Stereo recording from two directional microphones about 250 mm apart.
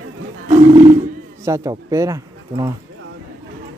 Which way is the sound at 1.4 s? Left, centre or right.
Centre.